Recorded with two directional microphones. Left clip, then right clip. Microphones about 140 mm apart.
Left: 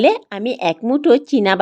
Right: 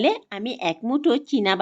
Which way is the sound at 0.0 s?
35° left (ahead or behind).